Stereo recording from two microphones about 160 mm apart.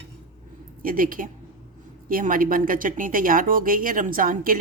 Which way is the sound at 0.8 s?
60° right (ahead or behind).